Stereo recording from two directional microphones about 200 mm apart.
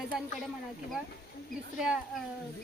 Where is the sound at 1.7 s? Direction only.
5° right (ahead or behind).